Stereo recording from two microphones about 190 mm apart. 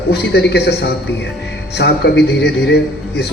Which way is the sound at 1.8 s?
65° left (ahead or behind).